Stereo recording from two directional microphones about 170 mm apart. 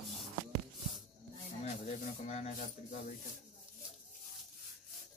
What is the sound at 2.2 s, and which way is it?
Speech, 40° left (ahead or behind).